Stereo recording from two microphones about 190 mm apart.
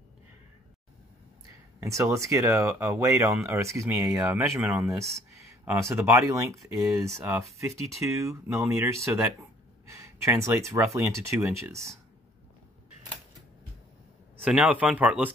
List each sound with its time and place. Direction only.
1.8 s speech: 15° right (ahead or behind)
14.3 s speech: 5° right (ahead or behind)